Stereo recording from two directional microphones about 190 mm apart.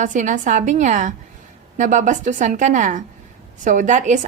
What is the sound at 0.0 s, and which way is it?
A woman's voice, 40° right (ahead or behind).